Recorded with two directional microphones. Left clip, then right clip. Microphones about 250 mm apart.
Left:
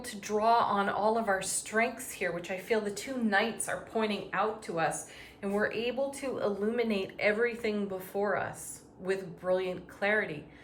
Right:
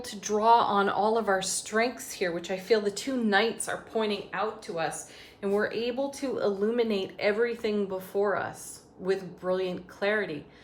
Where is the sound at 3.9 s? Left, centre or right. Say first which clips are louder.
Right 2 dB; centre.